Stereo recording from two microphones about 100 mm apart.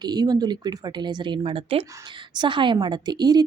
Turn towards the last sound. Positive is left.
turn(degrees=-40)  # may be behind; listen again after turning